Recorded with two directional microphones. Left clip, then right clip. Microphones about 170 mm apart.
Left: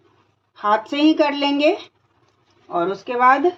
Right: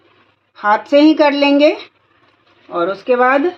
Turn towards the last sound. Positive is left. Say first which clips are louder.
# right 3 dB
turn(degrees=-30)  # may be behind; listen again after turning